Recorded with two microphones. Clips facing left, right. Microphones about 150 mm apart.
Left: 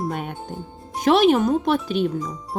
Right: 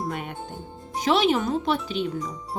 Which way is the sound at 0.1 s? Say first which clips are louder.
Left 3 dB; 50° left (ahead or behind).